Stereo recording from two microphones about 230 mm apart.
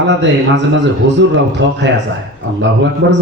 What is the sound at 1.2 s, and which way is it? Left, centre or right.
Speech, right.